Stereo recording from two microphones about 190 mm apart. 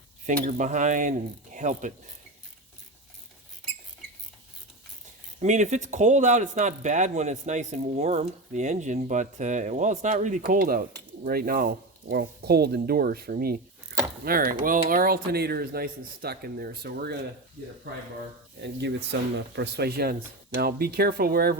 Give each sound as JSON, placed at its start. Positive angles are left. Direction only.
{"t": 0.5, "sound": "speech", "side_deg": -40}
{"t": 5.4, "sound": "speech", "side_deg": -40}
{"t": 18.6, "sound": "speech", "side_deg": -65}